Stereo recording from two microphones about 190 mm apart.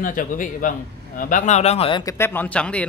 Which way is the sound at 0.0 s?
45° left (ahead or behind).